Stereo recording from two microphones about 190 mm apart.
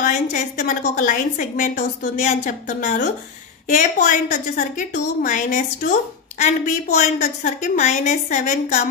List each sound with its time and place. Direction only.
0.0 s a woman's voice: 40° left (ahead or behind)